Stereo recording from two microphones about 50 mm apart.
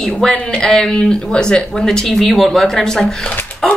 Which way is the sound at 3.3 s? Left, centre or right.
Left.